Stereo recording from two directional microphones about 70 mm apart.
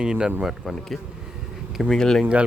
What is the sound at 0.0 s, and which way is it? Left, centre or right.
Speech, centre.